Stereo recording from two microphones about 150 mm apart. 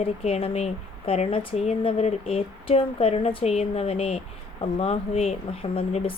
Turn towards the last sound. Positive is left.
turn(degrees=40)  # may be behind; listen again after turning